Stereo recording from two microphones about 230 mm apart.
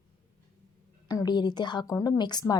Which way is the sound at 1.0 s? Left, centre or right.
Centre.